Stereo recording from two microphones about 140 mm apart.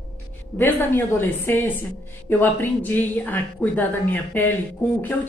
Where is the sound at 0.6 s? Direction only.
15° left (ahead or behind).